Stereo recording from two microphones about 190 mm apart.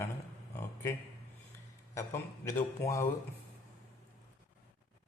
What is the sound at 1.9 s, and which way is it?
Speech, 15° left (ahead or behind).